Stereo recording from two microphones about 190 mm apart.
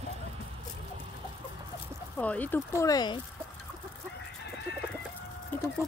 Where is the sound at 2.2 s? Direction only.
10° left (ahead or behind).